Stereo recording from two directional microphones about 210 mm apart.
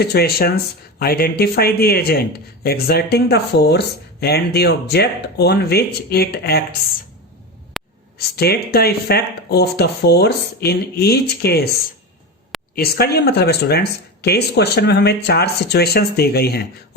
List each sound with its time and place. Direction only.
0.0 s speech: 50° left (ahead or behind)
7.8 s a sound: centre (ahead or behind)
8.4 s speech: 50° left (ahead or behind)
12.7 s speech: 50° left (ahead or behind)